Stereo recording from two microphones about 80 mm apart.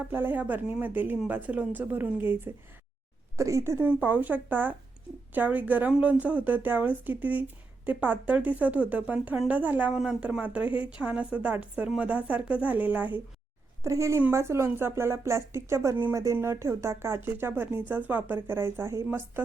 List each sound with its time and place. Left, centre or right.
0.1 s speech: right
3.3 s speech: right
3.8 s speech: right
9.9 s a woman's voice: centre
13.8 s speech: right